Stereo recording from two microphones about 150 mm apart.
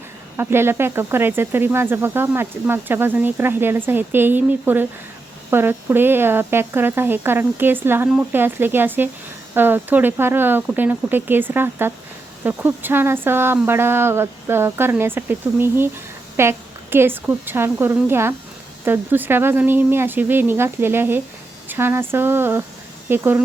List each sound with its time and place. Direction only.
0.3 s speech: 15° right (ahead or behind)